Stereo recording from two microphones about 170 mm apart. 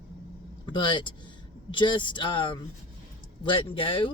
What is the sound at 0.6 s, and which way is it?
Speech, 25° left (ahead or behind).